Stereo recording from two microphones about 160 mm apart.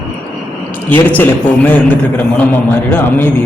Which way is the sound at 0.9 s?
10° left (ahead or behind).